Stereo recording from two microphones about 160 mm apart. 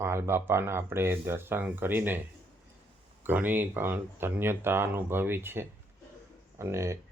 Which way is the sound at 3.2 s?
10° right (ahead or behind).